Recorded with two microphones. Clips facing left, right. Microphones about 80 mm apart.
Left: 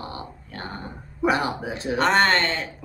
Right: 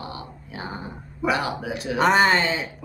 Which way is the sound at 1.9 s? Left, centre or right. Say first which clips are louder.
Right 1 dB; centre.